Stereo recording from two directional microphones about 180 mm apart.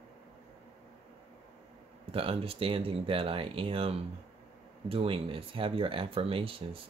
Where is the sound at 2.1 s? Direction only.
30° right (ahead or behind).